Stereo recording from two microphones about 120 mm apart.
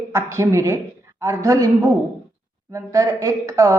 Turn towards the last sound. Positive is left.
turn(degrees=-25)  # may be behind; listen again after turning